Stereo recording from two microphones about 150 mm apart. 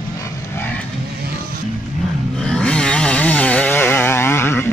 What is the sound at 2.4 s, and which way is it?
Chainsaw, 5° left (ahead or behind).